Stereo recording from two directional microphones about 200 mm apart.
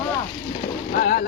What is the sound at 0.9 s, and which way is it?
Speech, 45° left (ahead or behind).